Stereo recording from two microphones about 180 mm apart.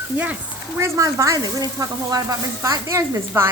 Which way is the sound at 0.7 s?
15° right (ahead or behind).